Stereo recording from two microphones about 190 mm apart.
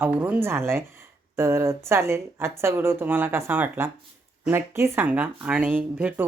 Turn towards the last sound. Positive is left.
turn(degrees=-5)  # may be behind; listen again after turning